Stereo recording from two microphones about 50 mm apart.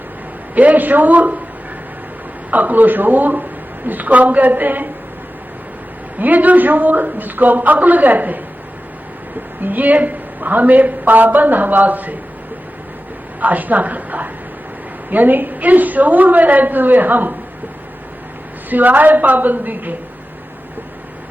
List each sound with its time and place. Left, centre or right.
0.5 s a woman's voice: right
2.5 s a woman's voice: right
6.1 s a woman's voice: right
9.6 s a woman's voice: right
13.4 s a woman's voice: right
18.7 s a woman's voice: right